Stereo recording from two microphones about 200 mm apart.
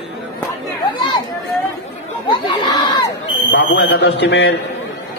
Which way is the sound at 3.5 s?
60° left (ahead or behind).